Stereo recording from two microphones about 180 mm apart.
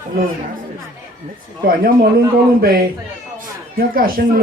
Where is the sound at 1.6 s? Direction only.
55° right (ahead or behind).